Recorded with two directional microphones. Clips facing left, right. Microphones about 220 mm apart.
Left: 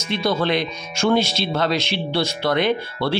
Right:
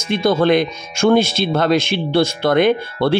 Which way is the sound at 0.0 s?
50° right (ahead or behind).